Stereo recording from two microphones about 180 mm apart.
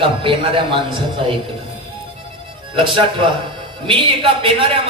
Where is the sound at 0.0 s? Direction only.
30° right (ahead or behind).